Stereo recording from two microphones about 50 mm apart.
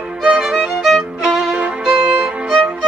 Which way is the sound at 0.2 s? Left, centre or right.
Centre.